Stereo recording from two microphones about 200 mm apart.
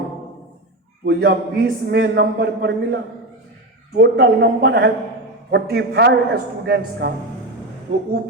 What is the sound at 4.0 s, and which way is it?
A man's voice, 55° right (ahead or behind).